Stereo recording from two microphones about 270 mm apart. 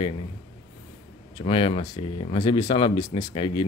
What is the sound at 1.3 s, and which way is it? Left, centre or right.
Speech, centre.